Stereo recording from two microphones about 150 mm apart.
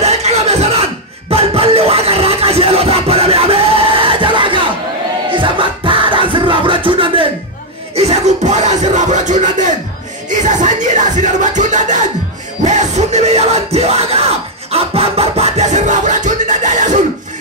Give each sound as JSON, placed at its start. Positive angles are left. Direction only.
{"t": 0.0, "sound": "music", "side_deg": -45}
{"t": 14.7, "sound": "scratching", "side_deg": -40}